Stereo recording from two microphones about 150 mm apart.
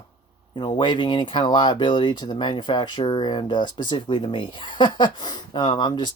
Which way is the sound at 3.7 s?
60° left (ahead or behind).